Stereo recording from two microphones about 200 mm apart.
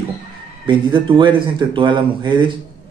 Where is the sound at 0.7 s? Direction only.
25° right (ahead or behind).